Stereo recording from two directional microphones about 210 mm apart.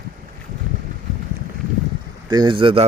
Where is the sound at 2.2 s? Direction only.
20° right (ahead or behind).